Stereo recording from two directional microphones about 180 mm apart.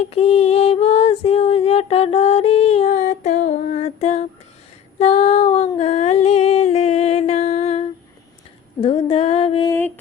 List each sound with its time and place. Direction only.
0.0 s a sound: 35° left (ahead or behind)
2.9 s female singing: 45° left (ahead or behind)
8.8 s mantra: 30° left (ahead or behind)
9.6 s mantra: 10° left (ahead or behind)